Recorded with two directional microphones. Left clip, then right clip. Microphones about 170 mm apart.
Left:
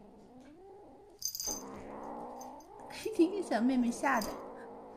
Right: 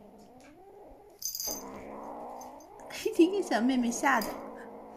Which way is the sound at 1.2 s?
20° left (ahead or behind).